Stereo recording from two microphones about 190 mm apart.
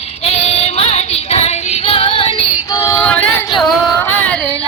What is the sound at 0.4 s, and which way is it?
Music, 30° left (ahead or behind).